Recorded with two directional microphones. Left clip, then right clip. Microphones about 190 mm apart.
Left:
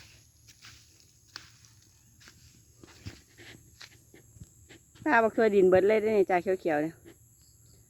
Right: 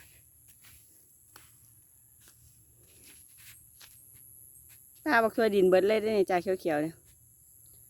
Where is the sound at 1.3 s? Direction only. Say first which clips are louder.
Left 10 dB; 10° right (ahead or behind).